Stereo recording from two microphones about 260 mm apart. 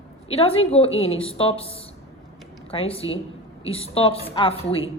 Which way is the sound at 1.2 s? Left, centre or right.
Left.